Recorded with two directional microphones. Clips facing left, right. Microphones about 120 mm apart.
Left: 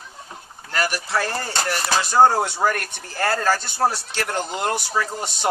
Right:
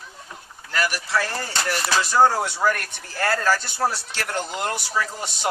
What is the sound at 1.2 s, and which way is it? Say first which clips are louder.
Speech: left 2 dB; 40° left (ahead or behind).